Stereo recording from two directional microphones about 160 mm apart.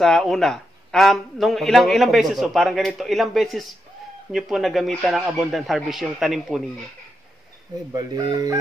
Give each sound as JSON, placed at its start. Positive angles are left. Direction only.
{"t": 0.0, "sound": "speech", "side_deg": 0}
{"t": 7.9, "sound": "speech", "side_deg": -25}